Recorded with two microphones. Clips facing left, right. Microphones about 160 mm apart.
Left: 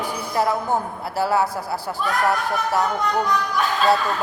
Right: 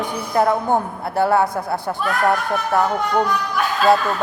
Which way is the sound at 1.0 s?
55° right (ahead or behind).